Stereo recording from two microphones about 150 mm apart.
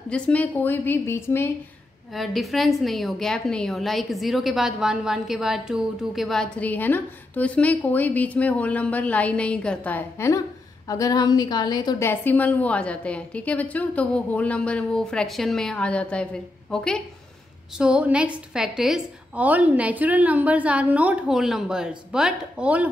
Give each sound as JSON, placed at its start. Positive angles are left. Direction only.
{"t": 0.1, "sound": "a woman's voice", "side_deg": 10}
{"t": 2.1, "sound": "a woman's voice", "side_deg": 0}
{"t": 12.1, "sound": "a woman's voice", "side_deg": 10}
{"t": 17.7, "sound": "a woman's voice", "side_deg": -5}